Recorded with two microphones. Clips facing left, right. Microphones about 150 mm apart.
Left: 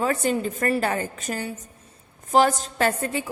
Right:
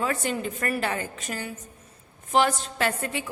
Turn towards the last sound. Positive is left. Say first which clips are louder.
# left 4 dB
turn(degrees=40)  # may be behind; listen again after turning